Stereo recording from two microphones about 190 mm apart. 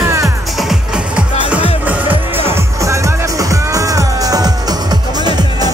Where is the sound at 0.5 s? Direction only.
5° right (ahead or behind).